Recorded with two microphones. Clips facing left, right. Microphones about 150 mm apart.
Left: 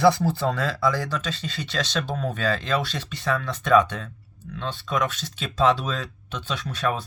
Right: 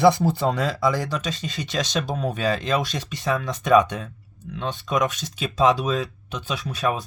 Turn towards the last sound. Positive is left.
turn(degrees=-10)  # may be behind; listen again after turning